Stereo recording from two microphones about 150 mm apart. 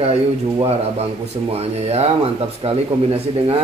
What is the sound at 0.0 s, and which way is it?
Speech, 45° right (ahead or behind).